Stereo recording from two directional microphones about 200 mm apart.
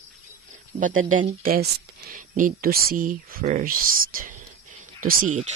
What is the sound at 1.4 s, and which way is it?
Speech, 45° right (ahead or behind).